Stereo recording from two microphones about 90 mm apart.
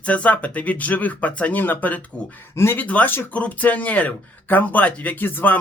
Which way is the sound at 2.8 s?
15° left (ahead or behind).